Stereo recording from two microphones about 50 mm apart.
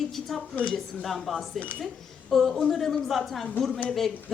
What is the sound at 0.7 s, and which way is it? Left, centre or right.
A woman's voice, centre.